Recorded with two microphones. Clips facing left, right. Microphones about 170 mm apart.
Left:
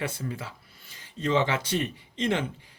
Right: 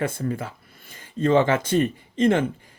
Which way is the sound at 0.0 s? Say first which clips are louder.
Right 7 dB; 50° right (ahead or behind).